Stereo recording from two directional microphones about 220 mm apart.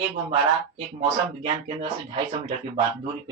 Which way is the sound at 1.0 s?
30° right (ahead or behind).